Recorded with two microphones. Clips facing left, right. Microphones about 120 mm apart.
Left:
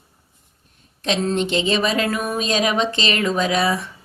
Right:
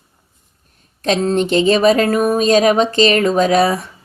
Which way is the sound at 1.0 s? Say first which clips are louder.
Right 5 dB; 45° right (ahead or behind).